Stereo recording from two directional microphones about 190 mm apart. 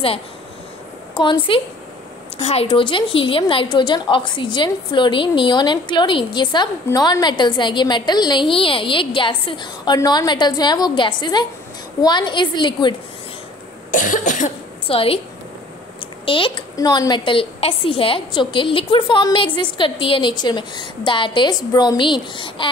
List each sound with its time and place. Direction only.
1.1 s a woman's voice: 25° left (ahead or behind)
13.9 s cough: 40° left (ahead or behind)
14.9 s a woman's voice: 30° left (ahead or behind)
16.3 s a woman's voice: 30° left (ahead or behind)